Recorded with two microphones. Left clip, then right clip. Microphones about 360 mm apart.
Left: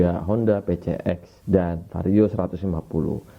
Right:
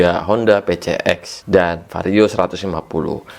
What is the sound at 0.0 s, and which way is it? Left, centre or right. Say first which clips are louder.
A man's voice: right 8 dB; centre.